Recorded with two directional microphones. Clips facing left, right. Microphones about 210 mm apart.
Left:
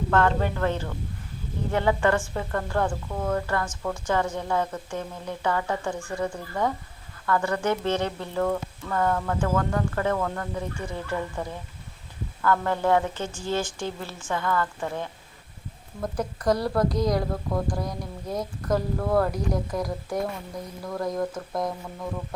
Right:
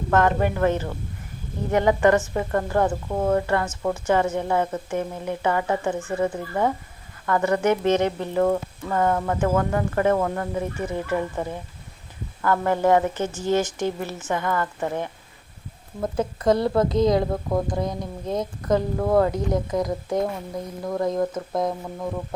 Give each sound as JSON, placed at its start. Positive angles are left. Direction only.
{"t": 0.1, "sound": "a woman's voice", "side_deg": -15}
{"t": 3.9, "sound": "speech", "side_deg": -5}
{"t": 4.4, "sound": "a woman's voice", "side_deg": -20}